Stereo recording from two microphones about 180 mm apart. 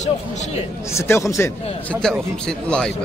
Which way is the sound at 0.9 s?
15° left (ahead or behind).